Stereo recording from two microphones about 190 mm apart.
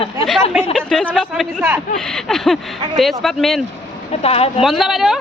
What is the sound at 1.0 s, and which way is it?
Speech, centre (ahead or behind).